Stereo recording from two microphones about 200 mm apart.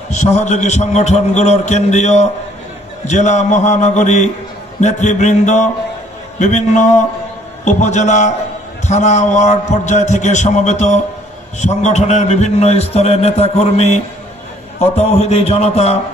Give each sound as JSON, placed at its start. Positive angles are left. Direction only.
{"t": 0.1, "sound": "a man's voice", "side_deg": 35}